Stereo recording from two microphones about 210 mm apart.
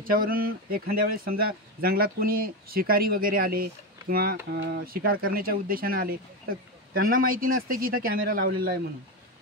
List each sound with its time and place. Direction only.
0.0 s speech: 45° right (ahead or behind)